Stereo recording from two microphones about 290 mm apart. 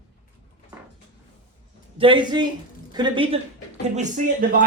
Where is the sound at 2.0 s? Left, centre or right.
Centre.